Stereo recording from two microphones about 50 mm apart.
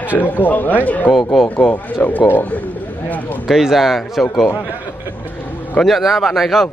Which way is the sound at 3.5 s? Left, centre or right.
Centre.